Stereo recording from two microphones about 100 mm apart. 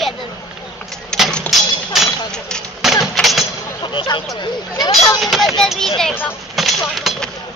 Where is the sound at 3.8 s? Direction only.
50° left (ahead or behind).